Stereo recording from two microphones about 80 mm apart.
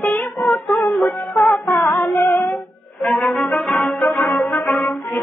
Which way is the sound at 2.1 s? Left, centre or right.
Left.